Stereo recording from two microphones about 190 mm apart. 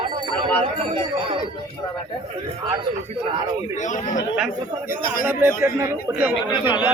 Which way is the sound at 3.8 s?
40° left (ahead or behind).